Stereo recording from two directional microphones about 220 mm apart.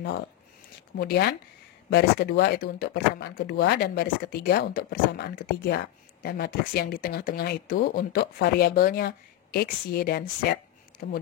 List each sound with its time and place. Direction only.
0.9 s speech: 45° left (ahead or behind)